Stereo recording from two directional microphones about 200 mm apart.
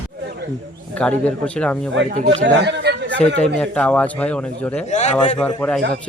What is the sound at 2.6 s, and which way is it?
Chatter, 60° right (ahead or behind).